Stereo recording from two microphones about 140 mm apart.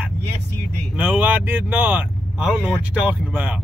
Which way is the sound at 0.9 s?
10° right (ahead or behind).